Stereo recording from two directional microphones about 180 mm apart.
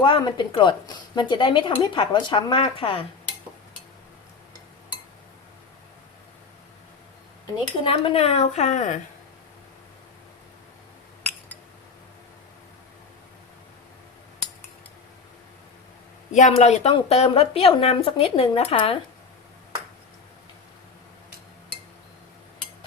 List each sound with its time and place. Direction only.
0.0 s speech: 25° left (ahead or behind)
7.9 s a woman's voice: 30° left (ahead or behind)
16.3 s a woman's voice: 40° left (ahead or behind)